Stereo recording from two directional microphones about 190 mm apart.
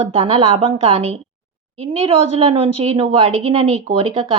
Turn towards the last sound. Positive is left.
turn(degrees=-30)  # may be behind; listen again after turning